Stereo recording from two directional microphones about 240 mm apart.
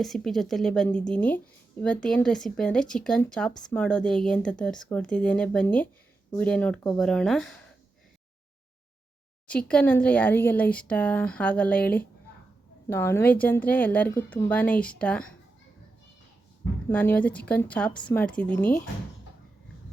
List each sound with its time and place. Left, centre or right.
0.0 s a woman's voice: centre
9.5 s a woman's voice: centre
16.9 s a woman's voice: centre